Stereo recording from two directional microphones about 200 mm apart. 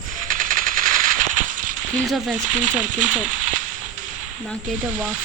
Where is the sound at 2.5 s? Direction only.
40° right (ahead or behind).